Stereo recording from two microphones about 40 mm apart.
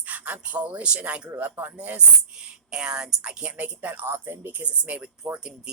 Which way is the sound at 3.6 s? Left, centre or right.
Right.